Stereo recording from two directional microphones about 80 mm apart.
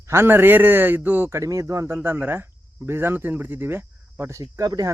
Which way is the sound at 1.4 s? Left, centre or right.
Right.